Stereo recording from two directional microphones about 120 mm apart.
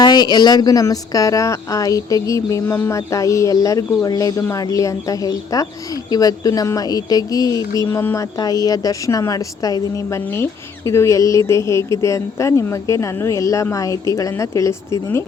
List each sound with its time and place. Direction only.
0.0 s speech: 35° left (ahead or behind)